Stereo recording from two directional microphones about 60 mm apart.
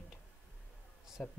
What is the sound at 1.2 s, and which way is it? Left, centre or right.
Speech, centre.